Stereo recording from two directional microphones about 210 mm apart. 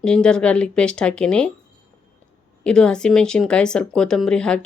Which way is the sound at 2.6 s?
5° left (ahead or behind).